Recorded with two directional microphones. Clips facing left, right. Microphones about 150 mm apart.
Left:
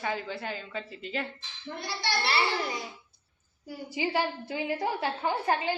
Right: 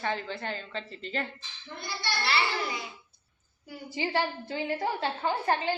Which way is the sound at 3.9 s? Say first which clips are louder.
Even; 15° left (ahead or behind).